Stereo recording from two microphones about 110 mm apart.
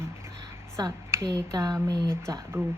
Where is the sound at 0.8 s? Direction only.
30° right (ahead or behind).